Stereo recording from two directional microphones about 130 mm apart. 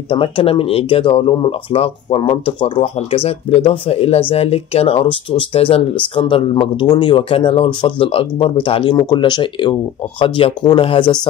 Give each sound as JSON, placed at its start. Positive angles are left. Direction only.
{"t": 0.1, "sound": "speech", "side_deg": 45}